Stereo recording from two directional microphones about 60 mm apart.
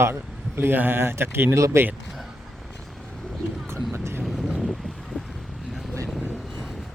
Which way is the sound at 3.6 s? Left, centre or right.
Right.